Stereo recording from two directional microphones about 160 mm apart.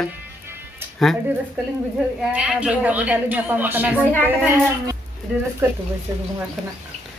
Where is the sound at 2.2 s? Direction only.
5° right (ahead or behind).